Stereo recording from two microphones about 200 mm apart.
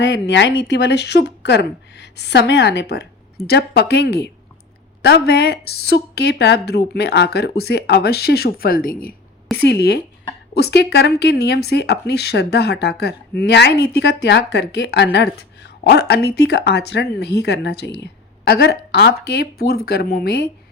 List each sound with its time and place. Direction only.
0.0 s a woman's voice: 60° left (ahead or behind)